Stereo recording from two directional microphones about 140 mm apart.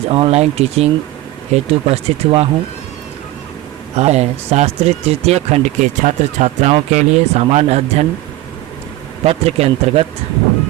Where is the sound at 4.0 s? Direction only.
50° right (ahead or behind).